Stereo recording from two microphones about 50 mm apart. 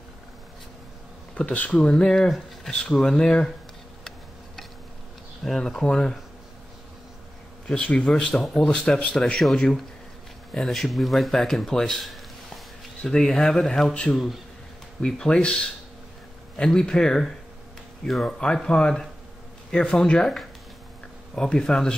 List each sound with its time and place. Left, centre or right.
1.3 s speech: left
1.8 s speech: centre
5.4 s speech: centre
7.6 s speech: left
12.0 s a sound: centre
13.0 s speech: centre
15.0 s speech: centre
16.5 s speech: centre
18.2 s speech: centre